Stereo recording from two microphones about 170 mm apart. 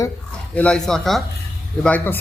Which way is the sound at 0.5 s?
5° left (ahead or behind).